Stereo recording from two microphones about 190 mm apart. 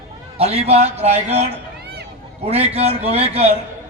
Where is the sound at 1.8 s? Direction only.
60° right (ahead or behind).